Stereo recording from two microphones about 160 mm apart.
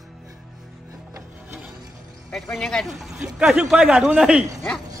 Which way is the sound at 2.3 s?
Centre (ahead or behind).